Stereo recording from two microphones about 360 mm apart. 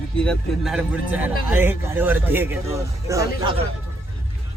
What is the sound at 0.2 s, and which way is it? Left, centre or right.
A man's voice, centre.